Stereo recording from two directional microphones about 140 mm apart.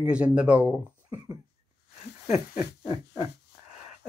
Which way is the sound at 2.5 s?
20° right (ahead or behind).